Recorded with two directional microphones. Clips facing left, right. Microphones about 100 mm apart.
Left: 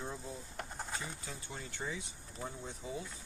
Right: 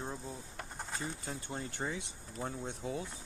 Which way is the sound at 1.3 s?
55° right (ahead or behind).